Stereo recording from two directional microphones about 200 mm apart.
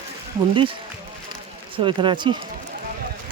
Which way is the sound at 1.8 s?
25° right (ahead or behind).